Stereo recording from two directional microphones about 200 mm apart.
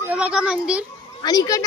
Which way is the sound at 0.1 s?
5° right (ahead or behind).